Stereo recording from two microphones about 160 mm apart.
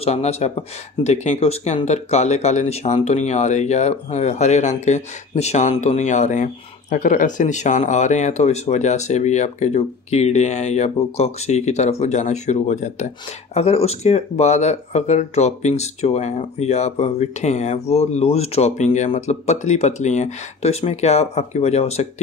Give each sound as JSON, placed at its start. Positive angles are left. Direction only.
{"t": 0.0, "sound": "speech", "side_deg": 40}